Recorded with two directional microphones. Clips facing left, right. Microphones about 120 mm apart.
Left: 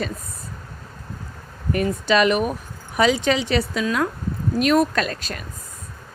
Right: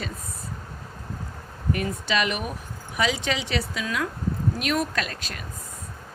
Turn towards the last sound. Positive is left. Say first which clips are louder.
# left 6 dB
turn(degrees=40)  # may be behind; listen again after turning